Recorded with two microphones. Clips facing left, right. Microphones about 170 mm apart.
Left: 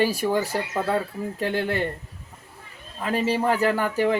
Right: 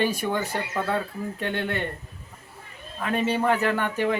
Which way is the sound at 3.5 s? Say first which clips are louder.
Left 1 dB; 35° left (ahead or behind).